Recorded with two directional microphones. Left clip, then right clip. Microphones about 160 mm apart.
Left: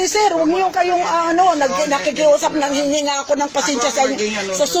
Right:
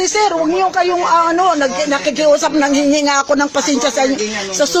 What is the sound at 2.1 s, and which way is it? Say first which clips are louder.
A man's voice: right 2 dB; 40° right (ahead or behind).